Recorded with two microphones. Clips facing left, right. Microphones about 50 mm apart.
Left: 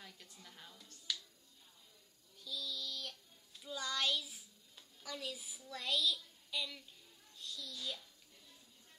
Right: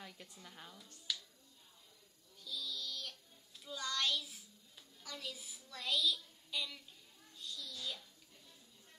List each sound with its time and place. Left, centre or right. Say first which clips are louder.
0.0 s music: right 3 dB; centre
2.3 s child singing: even; centre
5.7 s a woman's voice: even; centre
7.3 s a sound: even; centre